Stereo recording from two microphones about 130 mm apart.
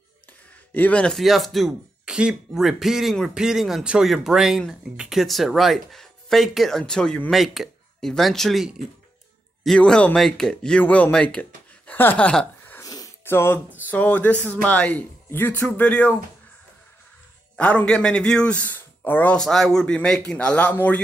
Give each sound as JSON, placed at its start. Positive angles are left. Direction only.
{"t": 0.7, "sound": "a man's voice", "side_deg": 10}
{"t": 11.9, "sound": "a sound", "side_deg": 15}
{"t": 12.8, "sound": "wheeze", "side_deg": 25}
{"t": 13.7, "sound": "a man's voice", "side_deg": 15}
{"t": 17.6, "sound": "a man's voice", "side_deg": 10}